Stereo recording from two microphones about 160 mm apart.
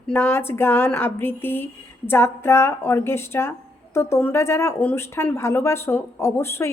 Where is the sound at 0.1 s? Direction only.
15° left (ahead or behind).